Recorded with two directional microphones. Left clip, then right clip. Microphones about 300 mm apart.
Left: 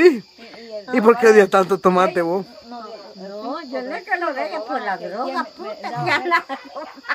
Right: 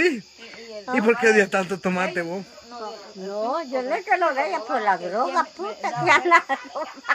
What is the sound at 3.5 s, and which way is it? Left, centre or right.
Speech, centre.